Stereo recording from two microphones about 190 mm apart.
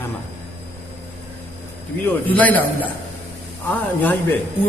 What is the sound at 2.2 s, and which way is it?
Speech, 10° left (ahead or behind).